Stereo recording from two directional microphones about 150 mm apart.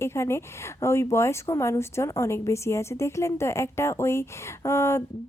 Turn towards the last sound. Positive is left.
turn(degrees=15)  # may be behind; listen again after turning